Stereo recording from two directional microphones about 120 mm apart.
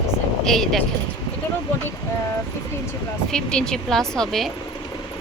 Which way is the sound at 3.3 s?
5° left (ahead or behind).